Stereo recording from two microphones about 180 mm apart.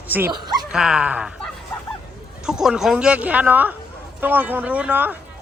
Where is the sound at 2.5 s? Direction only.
Centre (ahead or behind).